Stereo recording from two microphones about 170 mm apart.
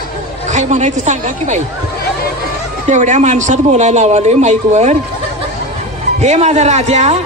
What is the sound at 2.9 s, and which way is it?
A man's voice, 45° right (ahead or behind).